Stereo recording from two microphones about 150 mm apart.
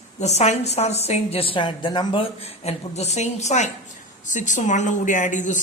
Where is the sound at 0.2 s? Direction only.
50° left (ahead or behind).